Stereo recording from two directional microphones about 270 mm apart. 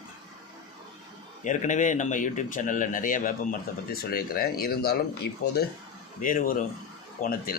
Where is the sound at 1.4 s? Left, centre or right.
Left.